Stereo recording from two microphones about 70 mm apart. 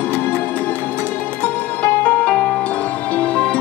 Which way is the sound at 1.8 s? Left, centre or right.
Centre.